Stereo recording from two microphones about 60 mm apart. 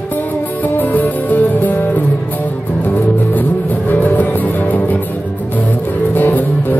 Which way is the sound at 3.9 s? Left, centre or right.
Left.